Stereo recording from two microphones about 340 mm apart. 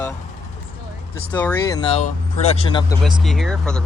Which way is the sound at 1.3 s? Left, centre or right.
Centre.